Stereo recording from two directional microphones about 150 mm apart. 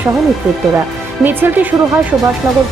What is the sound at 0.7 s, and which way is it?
Speech, 15° right (ahead or behind).